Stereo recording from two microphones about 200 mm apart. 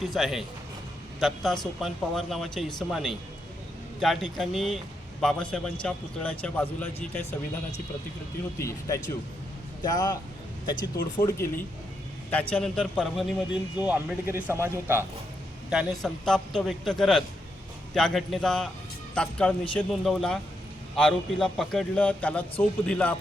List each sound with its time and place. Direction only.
0.0 s a man's voice: centre (ahead or behind)
15.7 s a man's voice: centre (ahead or behind)